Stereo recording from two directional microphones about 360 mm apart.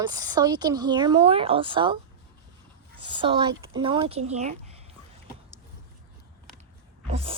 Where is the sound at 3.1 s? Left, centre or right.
Centre.